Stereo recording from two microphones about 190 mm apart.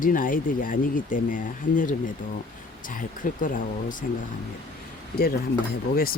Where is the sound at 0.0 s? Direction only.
45° left (ahead or behind).